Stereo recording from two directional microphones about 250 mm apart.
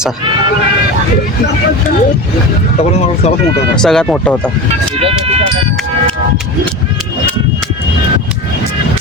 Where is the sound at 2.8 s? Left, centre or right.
Left.